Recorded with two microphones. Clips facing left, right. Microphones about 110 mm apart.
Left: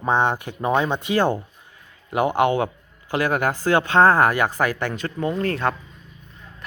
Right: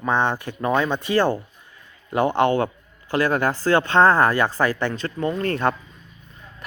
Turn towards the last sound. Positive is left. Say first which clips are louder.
# right 1 dB
turn(degrees=0)  # may be behind; listen again after turning